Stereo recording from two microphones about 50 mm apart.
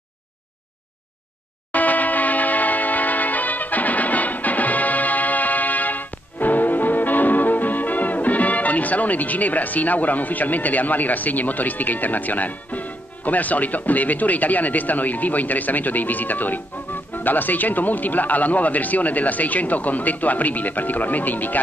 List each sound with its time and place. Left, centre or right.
1.7 s music: left
17.1 s speech: left